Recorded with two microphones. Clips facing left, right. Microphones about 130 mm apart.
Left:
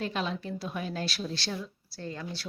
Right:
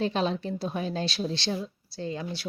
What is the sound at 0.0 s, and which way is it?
A woman's voice, 30° right (ahead or behind).